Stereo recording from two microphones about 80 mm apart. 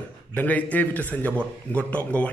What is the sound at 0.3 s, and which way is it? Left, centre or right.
A man's voice, left.